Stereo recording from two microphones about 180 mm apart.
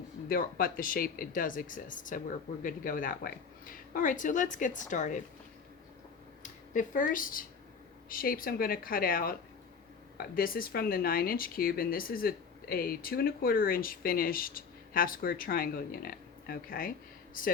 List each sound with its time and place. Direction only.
0.3 s speech: 55° left (ahead or behind)
6.4 s speech: 45° left (ahead or behind)